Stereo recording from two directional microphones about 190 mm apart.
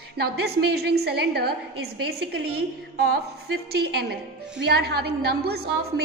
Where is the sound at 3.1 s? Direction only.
55° right (ahead or behind).